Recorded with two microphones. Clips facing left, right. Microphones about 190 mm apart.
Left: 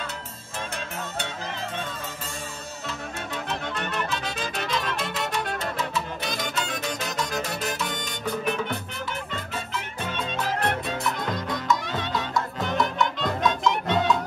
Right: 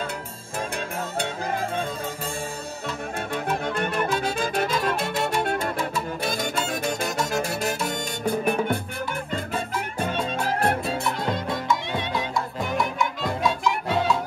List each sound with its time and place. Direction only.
3.4 s music: 50° right (ahead or behind)
10.9 s music: 30° right (ahead or behind)
11.9 s music: 15° right (ahead or behind)